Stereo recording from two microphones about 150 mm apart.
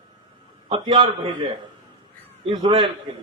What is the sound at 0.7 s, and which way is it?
Speech, 30° right (ahead or behind).